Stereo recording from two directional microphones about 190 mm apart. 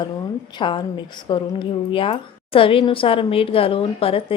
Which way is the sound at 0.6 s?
25° left (ahead or behind).